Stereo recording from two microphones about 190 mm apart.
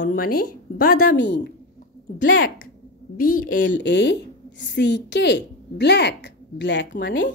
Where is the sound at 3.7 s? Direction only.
65° left (ahead or behind).